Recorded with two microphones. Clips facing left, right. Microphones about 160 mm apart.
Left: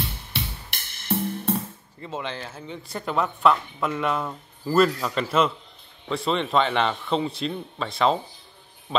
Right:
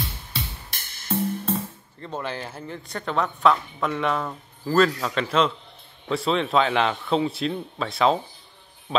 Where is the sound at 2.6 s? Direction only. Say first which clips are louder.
Even; centre (ahead or behind).